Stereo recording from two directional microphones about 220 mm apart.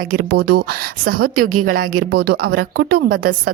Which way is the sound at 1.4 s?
85° right.